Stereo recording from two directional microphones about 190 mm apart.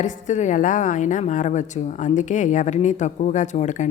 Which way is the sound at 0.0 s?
40° left (ahead or behind).